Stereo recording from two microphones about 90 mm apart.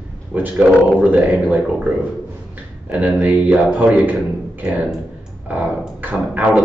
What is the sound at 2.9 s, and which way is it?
A man's voice, 15° right (ahead or behind).